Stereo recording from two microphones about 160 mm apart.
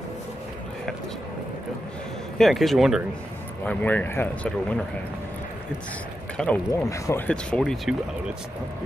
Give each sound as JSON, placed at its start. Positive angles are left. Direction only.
{"t": 2.3, "sound": "speech", "side_deg": 0}
{"t": 3.6, "sound": "speech", "side_deg": 10}
{"t": 6.3, "sound": "speech", "side_deg": 5}
{"t": 6.7, "sound": "speech", "side_deg": 20}
{"t": 7.2, "sound": "speech", "side_deg": 5}